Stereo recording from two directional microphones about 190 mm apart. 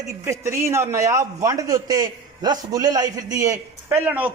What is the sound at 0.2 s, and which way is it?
A man's voice, 15° right (ahead or behind).